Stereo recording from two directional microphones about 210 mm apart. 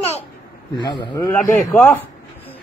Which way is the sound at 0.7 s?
20° left (ahead or behind).